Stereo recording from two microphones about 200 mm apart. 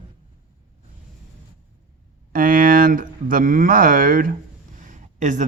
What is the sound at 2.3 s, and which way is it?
A man's voice, 45° right (ahead or behind).